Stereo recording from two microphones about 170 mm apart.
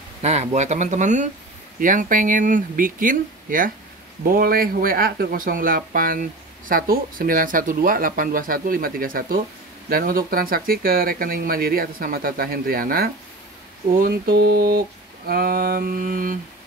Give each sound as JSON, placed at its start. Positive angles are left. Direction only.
{"t": 0.2, "sound": "speech", "side_deg": -40}